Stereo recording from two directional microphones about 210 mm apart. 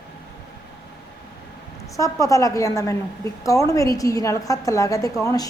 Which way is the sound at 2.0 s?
15° left (ahead or behind).